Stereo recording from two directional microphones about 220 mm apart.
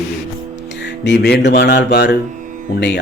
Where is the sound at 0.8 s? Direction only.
55° left (ahead or behind).